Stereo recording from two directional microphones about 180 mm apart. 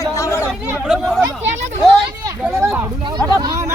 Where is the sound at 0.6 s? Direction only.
5° right (ahead or behind).